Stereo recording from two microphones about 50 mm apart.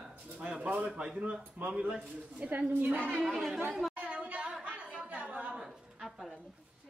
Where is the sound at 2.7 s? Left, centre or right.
Right.